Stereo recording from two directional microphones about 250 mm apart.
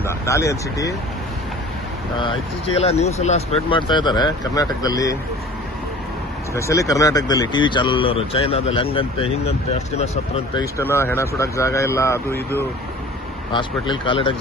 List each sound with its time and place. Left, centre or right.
0.0 s speech: centre
2.1 s speech: left
6.5 s speech: centre
10.5 s speech: centre